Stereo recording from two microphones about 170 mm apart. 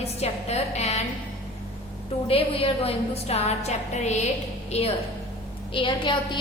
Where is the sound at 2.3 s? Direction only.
35° left (ahead or behind).